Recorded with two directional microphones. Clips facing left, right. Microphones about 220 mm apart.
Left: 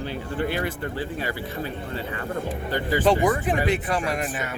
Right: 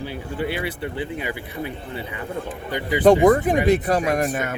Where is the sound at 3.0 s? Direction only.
50° right (ahead or behind).